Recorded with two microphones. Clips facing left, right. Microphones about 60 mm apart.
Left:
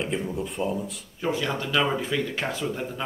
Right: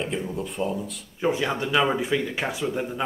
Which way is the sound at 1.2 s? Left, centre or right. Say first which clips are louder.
Right 3 dB; centre.